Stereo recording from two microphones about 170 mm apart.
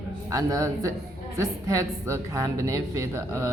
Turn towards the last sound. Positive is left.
turn(degrees=-15)  # may be behind; listen again after turning